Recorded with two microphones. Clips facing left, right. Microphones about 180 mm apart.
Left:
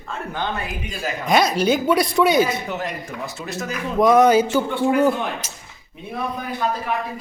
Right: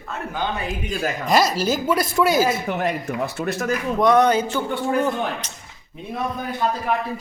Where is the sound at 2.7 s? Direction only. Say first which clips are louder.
Right 4 dB; 60° right (ahead or behind).